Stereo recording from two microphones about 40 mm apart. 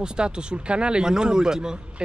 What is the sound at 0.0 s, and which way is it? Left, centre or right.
Speech, right.